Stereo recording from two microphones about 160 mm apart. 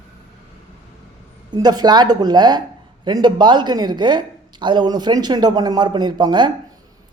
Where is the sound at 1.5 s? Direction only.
25° right (ahead or behind).